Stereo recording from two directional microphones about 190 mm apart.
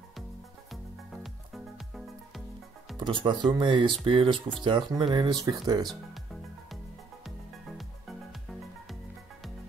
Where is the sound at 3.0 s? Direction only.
25° right (ahead or behind).